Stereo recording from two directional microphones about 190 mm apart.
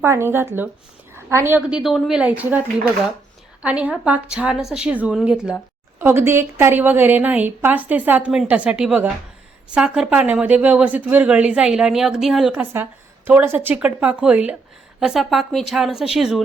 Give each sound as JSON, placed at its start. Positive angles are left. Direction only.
{"t": 0.0, "sound": "speech", "side_deg": -10}